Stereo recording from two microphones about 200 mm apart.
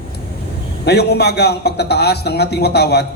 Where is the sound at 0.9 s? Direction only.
55° left (ahead or behind).